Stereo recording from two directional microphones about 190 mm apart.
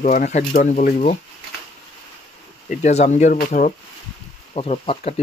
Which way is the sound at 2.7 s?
35° left (ahead or behind).